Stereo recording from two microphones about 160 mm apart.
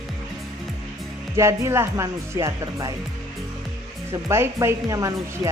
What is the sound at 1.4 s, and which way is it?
Speech, 15° right (ahead or behind).